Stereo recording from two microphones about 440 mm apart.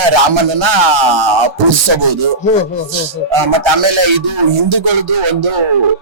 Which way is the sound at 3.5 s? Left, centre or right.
Right.